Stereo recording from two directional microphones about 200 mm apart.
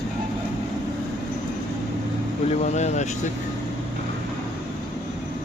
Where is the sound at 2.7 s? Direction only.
35° left (ahead or behind).